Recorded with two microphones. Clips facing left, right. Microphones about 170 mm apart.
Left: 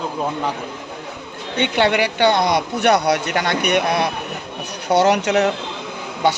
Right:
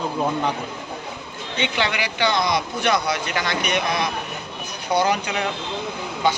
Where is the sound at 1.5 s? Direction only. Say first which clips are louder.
Left 7 dB; 60° left (ahead or behind).